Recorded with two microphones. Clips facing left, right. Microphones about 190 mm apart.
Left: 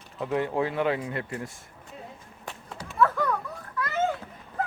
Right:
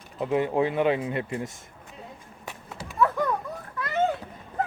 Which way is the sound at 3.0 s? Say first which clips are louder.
Even; 20° right (ahead or behind).